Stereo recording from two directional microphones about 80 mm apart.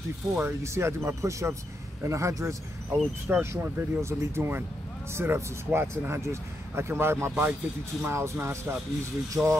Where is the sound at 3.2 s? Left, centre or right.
Right.